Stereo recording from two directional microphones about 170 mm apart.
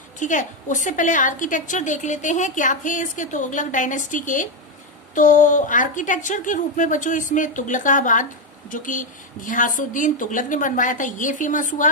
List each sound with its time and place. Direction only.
0.2 s a woman's voice: 50° left (ahead or behind)